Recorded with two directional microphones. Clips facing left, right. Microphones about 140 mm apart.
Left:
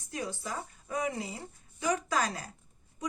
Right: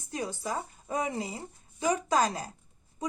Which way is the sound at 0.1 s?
25° right (ahead or behind).